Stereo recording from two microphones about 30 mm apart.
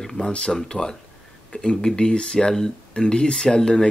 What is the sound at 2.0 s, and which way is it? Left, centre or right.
Speech, left.